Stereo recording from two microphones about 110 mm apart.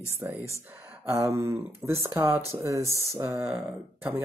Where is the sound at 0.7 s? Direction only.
20° right (ahead or behind).